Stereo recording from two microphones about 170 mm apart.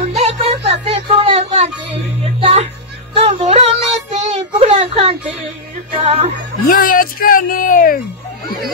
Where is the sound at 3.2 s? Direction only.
35° right (ahead or behind).